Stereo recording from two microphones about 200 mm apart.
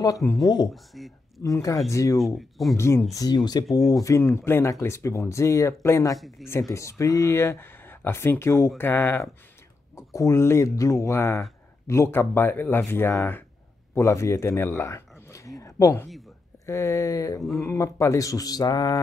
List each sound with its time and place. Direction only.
0.0 s speech: 15° left (ahead or behind)
0.9 s speech: centre (ahead or behind)
1.4 s speech: 15° left (ahead or behind)
2.1 s speech: centre (ahead or behind)
2.8 s a man's voice: 15° left (ahead or behind)
17.4 s speech: centre (ahead or behind)
17.6 s speech: 15° left (ahead or behind)